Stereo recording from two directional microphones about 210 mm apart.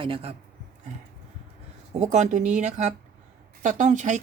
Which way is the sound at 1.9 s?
35° right (ahead or behind).